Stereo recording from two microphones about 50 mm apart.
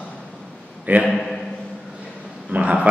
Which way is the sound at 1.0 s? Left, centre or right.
Centre.